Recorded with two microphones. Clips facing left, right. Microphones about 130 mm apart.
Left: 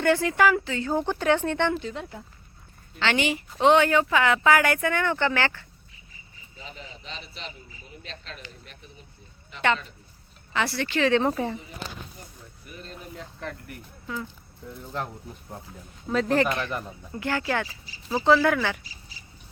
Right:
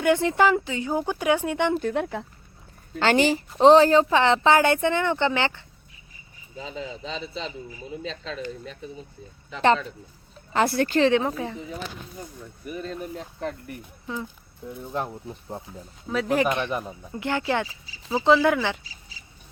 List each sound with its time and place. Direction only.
0.0 s speech: 20° right (ahead or behind)
1.7 s speech: 55° right (ahead or behind)
3.0 s speech: 40° right (ahead or behind); by 5.6 s 20° right (ahead or behind)
10.5 s speech: 45° right (ahead or behind)
11.2 s speech: centre (ahead or behind)
13.1 s speech: 30° right (ahead or behind)
16.0 s speech: centre (ahead or behind)
16.4 s speech: 20° right (ahead or behind)